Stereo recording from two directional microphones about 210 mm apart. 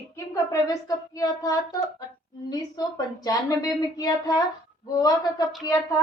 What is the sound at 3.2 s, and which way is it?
A woman's voice, 15° left (ahead or behind).